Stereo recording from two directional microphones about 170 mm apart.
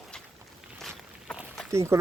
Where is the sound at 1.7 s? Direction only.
15° right (ahead or behind).